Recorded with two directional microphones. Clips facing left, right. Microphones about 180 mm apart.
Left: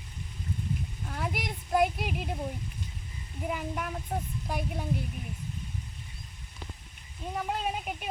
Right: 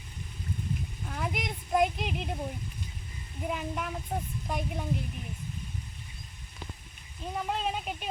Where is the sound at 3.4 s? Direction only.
Centre (ahead or behind).